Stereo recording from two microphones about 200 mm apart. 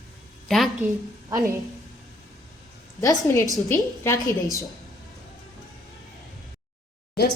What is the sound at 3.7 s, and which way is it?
Speech, 15° left (ahead or behind).